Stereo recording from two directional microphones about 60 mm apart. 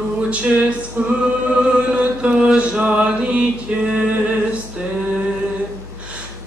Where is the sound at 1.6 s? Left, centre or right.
Centre.